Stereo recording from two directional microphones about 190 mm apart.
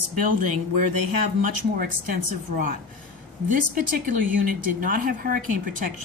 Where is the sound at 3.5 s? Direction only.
45° right (ahead or behind).